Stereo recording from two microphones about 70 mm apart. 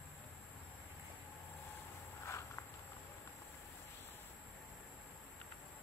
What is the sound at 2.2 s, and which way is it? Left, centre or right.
Walk, left.